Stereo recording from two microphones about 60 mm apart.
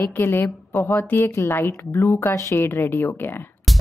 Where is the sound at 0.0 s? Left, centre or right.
Left.